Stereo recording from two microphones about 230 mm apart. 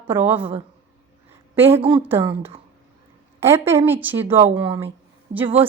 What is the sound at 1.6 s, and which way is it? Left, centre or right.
Speech, right.